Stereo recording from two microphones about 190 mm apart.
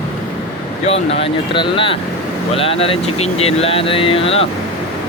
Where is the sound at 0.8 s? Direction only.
30° left (ahead or behind).